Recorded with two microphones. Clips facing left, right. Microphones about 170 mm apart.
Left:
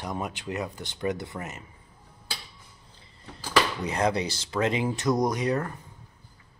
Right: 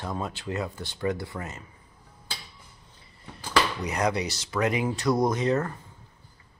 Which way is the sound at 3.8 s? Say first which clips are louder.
Left 1 dB; 30° left (ahead or behind).